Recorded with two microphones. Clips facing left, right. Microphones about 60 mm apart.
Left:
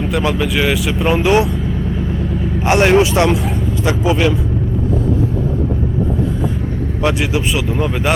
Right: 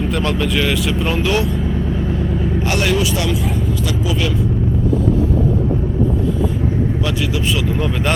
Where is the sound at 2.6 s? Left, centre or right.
Left.